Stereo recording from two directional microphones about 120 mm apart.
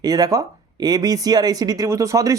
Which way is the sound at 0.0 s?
35° right (ahead or behind).